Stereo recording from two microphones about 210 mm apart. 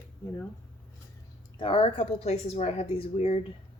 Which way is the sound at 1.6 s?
25° left (ahead or behind).